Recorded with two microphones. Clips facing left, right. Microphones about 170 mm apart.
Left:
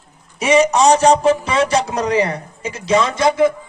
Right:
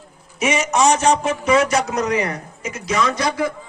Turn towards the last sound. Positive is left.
turn(degrees=25)  # may be behind; listen again after turning